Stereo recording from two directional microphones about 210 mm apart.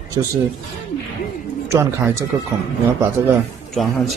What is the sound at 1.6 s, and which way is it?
Speech, 15° right (ahead or behind).